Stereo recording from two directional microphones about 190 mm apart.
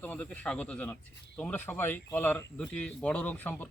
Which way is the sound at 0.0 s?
10° left (ahead or behind).